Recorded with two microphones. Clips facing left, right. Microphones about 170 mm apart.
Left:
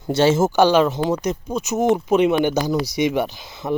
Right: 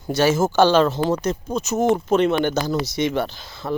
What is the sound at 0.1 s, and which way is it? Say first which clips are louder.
Speech: left 2 dB; 25° left (ahead or behind).